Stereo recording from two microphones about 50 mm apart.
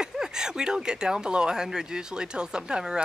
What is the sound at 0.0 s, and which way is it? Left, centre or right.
Speech, centre.